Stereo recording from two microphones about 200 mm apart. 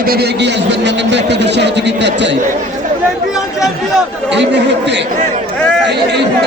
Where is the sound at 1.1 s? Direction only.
60° right (ahead or behind).